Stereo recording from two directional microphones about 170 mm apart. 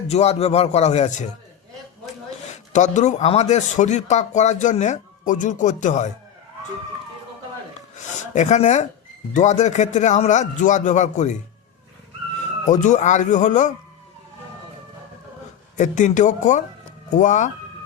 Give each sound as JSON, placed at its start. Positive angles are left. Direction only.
{"t": 0.1, "sound": "speech", "side_deg": 40}
{"t": 2.5, "sound": "speech", "side_deg": 45}
{"t": 7.9, "sound": "speech", "side_deg": 45}
{"t": 12.6, "sound": "speech", "side_deg": 45}
{"t": 15.8, "sound": "speech", "side_deg": 45}